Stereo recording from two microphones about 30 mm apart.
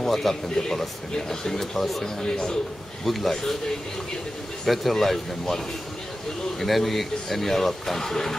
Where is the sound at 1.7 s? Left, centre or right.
Centre.